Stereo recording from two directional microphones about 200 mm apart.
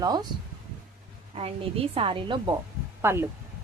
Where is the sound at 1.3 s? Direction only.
30° right (ahead or behind).